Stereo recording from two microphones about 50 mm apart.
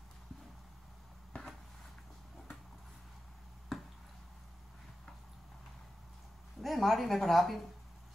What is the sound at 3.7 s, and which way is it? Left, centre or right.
Drip, centre.